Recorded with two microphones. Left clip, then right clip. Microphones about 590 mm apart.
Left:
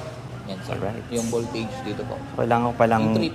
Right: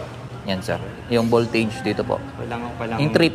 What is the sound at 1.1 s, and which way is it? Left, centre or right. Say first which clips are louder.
Speech: right 10 dB; right.